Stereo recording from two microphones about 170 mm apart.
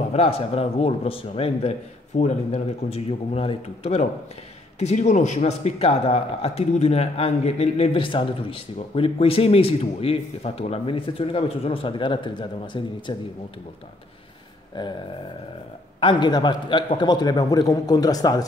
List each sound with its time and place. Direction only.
0.1 s speech: 35° left (ahead or behind)
14.7 s a man's voice: 25° left (ahead or behind)
16.0 s a man's voice: 25° left (ahead or behind)